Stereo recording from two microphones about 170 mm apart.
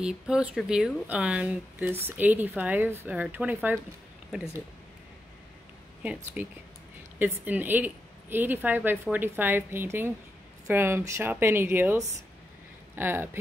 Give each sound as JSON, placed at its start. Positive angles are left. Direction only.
{"t": 0.0, "sound": "a woman's voice", "side_deg": -5}
{"t": 6.4, "sound": "a woman's voice", "side_deg": -10}